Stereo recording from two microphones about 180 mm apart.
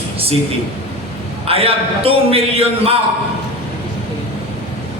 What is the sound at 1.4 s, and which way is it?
A man's voice, 30° right (ahead or behind).